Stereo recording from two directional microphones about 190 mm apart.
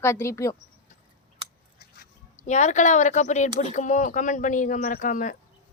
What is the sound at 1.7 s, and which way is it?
Speech, 45° left (ahead or behind).